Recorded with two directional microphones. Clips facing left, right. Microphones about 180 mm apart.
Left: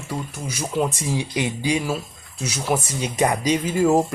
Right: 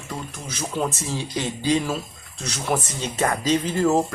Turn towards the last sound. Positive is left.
turn(degrees=10)  # may be behind; listen again after turning